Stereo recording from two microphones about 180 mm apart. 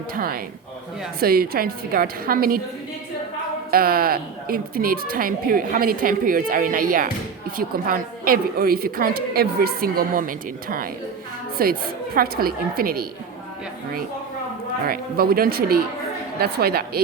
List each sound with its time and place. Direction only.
0.1 s a woman's voice: 55° right (ahead or behind)
3.7 s a woman's voice: 55° right (ahead or behind)
14.8 s a woman's voice: 55° right (ahead or behind)